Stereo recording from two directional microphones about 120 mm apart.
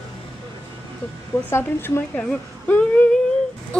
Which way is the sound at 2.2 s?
10° left (ahead or behind).